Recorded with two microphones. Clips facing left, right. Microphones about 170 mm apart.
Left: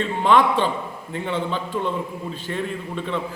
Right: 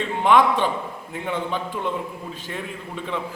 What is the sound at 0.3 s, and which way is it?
Speech, 10° right (ahead or behind).